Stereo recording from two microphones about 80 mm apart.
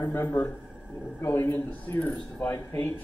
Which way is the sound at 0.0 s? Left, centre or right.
Left.